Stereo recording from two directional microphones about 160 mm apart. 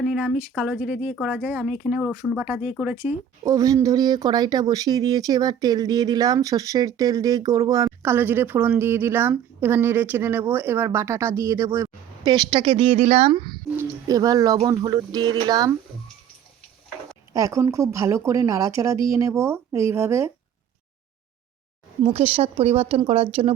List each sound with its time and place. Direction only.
0.0 s speech: centre (ahead or behind)
2.9 s speech: 20° right (ahead or behind)
17.3 s speech: 20° right (ahead or behind)
22.0 s speech: 40° right (ahead or behind)